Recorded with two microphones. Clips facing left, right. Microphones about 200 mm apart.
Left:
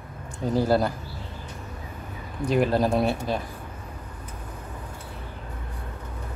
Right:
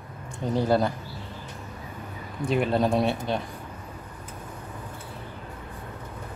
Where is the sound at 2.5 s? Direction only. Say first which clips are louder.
Left 1 dB; centre (ahead or behind).